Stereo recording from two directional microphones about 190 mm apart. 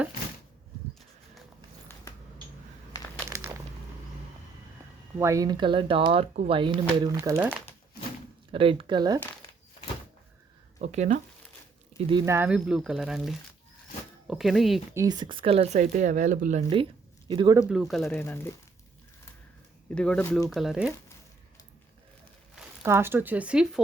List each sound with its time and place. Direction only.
3.2 s a sound: 15° right (ahead or behind)
5.1 s speech: 15° right (ahead or behind); by 6.6 s 35° right (ahead or behind)
6.6 s speech: 25° right (ahead or behind)
8.5 s speech: 30° right (ahead or behind)
10.8 s speech: 35° right (ahead or behind)
12.1 s speech: 15° right (ahead or behind)
14.9 s speech: 20° right (ahead or behind); by 16.6 s 40° right (ahead or behind)
17.2 s speech: 25° right (ahead or behind)
17.7 s speech: centre (ahead or behind)
18.2 s speech: 10° left (ahead or behind)
19.9 s speech: 5° left (ahead or behind)
22.8 s speech: 15° right (ahead or behind)